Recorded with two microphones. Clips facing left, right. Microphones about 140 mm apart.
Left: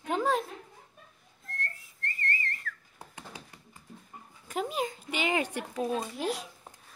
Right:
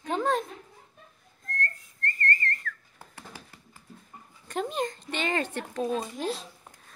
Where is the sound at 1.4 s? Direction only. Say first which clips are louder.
Right 6 dB; centre (ahead or behind).